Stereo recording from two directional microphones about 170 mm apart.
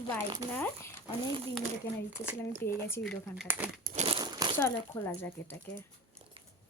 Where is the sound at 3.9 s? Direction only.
35° right (ahead or behind).